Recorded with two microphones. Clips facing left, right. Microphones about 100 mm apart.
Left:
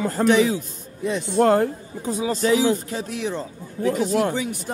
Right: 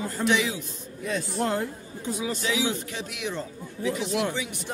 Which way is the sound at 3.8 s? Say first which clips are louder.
Left 6 dB; 45° left (ahead or behind).